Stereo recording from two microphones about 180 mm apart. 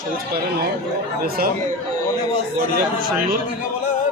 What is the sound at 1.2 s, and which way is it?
Speech, 55° right (ahead or behind).